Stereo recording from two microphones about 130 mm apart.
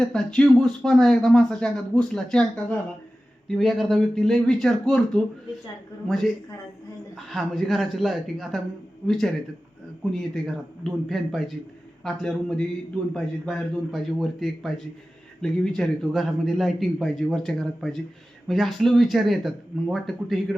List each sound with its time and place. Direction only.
0.0 s speech: 5° left (ahead or behind)